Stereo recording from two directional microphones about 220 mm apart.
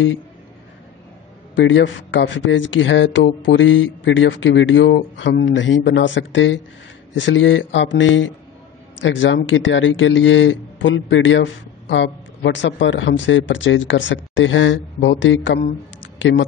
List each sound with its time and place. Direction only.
1.5 s speech: 55° left (ahead or behind)